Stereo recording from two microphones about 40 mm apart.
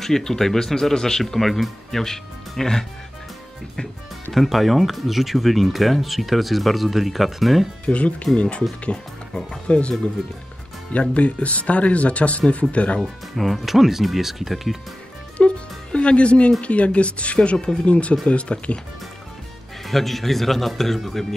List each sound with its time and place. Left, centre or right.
0.0 s speech: centre
4.3 s speech: centre
7.8 s speech: left
9.7 s speech: left
13.0 s speech: centre
15.3 s music: left
16.6 s speech: left
19.9 s speech: centre